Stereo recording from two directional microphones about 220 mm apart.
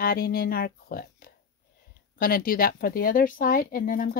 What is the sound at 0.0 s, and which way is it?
Speech, 40° left (ahead or behind).